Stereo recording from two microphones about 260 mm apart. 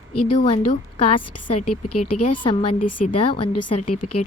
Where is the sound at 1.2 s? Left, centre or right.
Left.